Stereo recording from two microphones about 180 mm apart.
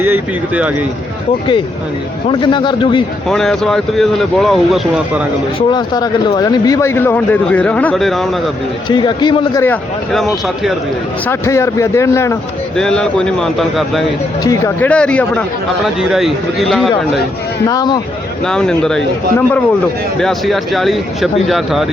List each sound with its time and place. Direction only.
0.0 s speech: 10° right (ahead or behind)
2.2 s speech: 25° left (ahead or behind)
3.2 s speech: centre (ahead or behind)
5.5 s speech: 25° left (ahead or behind); by 8.3 s centre (ahead or behind)
8.9 s speech: 25° left (ahead or behind)
9.6 s speech: centre (ahead or behind)
11.3 s speech: 15° left (ahead or behind)
12.7 s speech: 5° left (ahead or behind)
14.4 s speech: 20° left (ahead or behind); by 16.9 s centre (ahead or behind)
17.7 s speech: 20° left (ahead or behind)
18.4 s speech: 5° left (ahead or behind)